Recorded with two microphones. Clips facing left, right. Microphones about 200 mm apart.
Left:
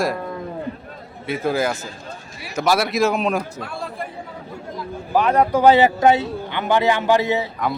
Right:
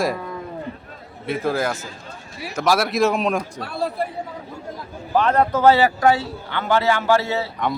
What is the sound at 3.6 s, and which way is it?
Chatter, 35° right (ahead or behind).